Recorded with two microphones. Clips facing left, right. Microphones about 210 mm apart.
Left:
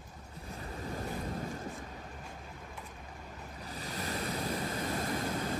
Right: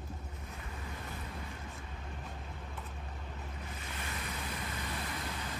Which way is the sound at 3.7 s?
35° left (ahead or behind).